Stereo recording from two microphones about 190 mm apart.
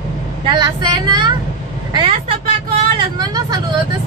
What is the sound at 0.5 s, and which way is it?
Child singing, 25° right (ahead or behind).